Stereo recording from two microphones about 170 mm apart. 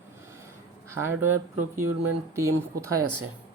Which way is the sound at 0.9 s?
15° right (ahead or behind).